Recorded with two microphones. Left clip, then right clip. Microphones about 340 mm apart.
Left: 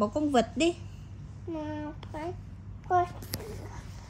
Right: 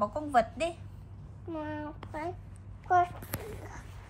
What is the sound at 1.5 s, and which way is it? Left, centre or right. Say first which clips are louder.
Child singing: left 1 dB; right.